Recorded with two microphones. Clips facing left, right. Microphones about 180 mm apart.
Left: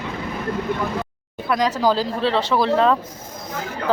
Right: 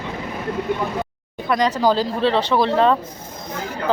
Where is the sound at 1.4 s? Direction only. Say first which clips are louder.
Right 1 dB; centre (ahead or behind).